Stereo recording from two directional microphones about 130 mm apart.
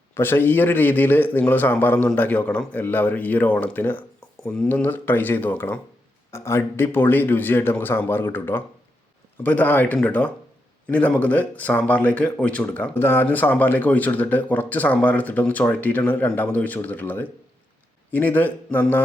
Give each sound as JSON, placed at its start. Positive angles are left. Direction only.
{"t": 0.1, "sound": "speech", "side_deg": 15}